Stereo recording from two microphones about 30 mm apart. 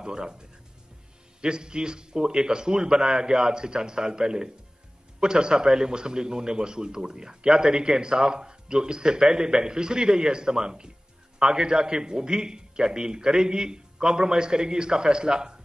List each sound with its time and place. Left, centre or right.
0.0 s a man's voice: right